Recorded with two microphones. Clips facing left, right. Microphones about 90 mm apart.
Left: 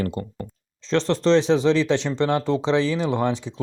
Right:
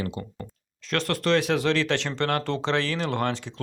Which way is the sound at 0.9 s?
25° left (ahead or behind).